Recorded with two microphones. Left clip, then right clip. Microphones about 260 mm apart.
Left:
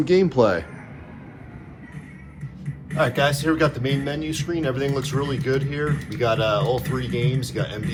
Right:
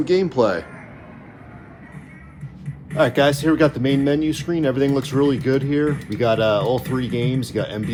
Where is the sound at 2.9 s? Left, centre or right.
Right.